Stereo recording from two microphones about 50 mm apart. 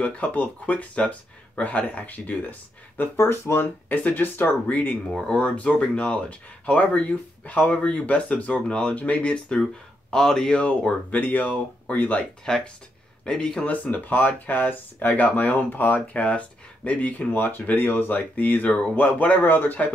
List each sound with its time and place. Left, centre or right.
0.0 s speech: left
3.2 s speech: left
3.9 s speech: left
4.6 s speech: left
11.1 s speech: left
13.2 s speech: centre
13.7 s speech: left
16.1 s speech: left